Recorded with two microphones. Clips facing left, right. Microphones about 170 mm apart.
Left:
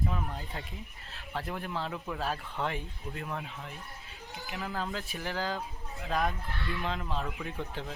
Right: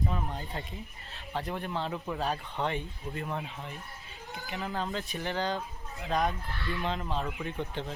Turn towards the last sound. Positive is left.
turn(degrees=0)  # may be behind; listen again after turning